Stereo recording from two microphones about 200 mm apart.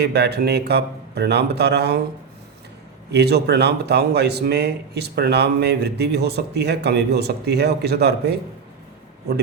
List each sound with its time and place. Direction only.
0.0 s a man's voice: 55° right (ahead or behind)
3.1 s a man's voice: 55° right (ahead or behind)